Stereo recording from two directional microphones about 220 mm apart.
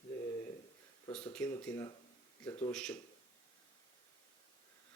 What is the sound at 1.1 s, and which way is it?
Speech, 5° left (ahead or behind).